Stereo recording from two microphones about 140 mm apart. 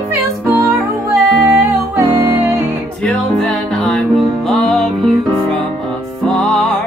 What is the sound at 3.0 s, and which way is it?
Music, 5° left (ahead or behind).